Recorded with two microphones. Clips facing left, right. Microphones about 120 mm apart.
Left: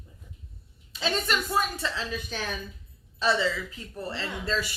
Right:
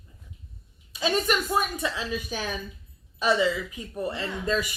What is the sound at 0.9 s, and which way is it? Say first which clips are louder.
A woman's voice: right 3 dB; 15° right (ahead or behind).